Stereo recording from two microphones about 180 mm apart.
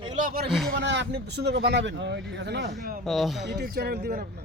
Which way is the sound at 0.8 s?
75° right (ahead or behind).